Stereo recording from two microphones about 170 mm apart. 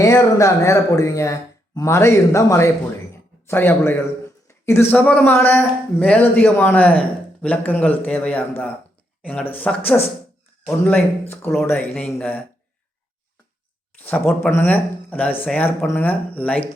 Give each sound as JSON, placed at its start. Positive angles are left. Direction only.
{"t": 0.0, "sound": "speech", "side_deg": 20}
{"t": 14.1, "sound": "speech", "side_deg": 10}